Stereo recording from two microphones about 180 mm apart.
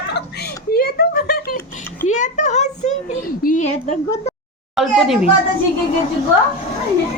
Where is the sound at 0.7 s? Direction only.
60° left (ahead or behind).